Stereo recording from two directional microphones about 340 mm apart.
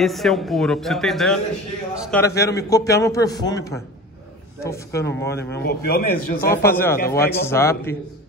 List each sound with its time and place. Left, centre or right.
0.0 s a man's voice: centre
5.7 s a man's voice: left
6.5 s a man's voice: centre